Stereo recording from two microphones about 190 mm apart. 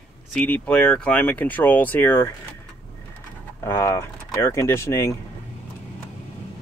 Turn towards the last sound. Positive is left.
turn(degrees=15)  # may be behind; listen again after turning